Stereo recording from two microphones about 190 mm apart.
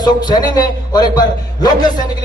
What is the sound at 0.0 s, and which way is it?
Speech, 20° left (ahead or behind).